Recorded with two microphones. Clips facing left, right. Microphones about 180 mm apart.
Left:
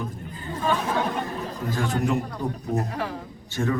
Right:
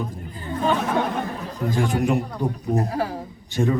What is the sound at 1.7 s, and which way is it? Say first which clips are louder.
Speech: right 3 dB; 15° right (ahead or behind).